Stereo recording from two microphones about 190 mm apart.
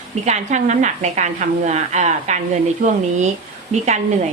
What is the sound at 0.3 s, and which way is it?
A woman's voice, 40° right (ahead or behind).